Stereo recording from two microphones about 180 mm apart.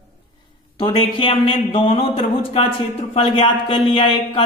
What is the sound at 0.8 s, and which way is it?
Speech, 30° left (ahead or behind).